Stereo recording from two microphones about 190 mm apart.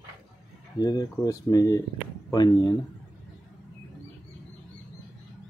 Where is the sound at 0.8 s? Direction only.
20° left (ahead or behind).